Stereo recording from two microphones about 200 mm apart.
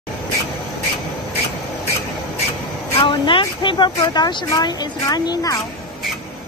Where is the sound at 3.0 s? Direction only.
25° left (ahead or behind).